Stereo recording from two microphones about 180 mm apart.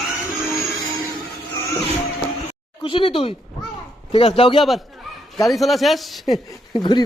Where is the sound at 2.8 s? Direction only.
30° left (ahead or behind).